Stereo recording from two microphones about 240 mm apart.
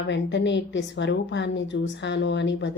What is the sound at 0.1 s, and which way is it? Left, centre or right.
A woman's voice, left.